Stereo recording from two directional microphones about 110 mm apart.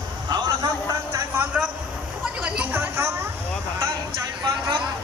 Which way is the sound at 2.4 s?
10° right (ahead or behind).